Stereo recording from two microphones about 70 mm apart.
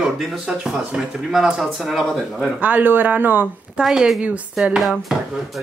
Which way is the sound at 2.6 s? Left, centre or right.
Right.